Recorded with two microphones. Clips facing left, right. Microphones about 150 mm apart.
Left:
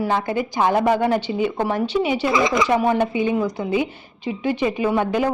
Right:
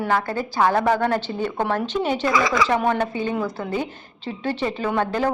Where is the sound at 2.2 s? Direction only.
25° left (ahead or behind).